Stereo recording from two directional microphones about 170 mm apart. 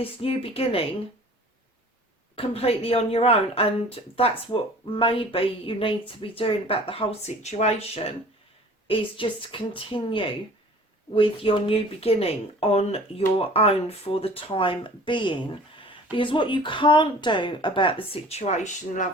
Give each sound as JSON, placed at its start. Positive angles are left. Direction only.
{"t": 0.0, "sound": "a woman's voice", "side_deg": 35}
{"t": 2.3, "sound": "a woman's voice", "side_deg": 35}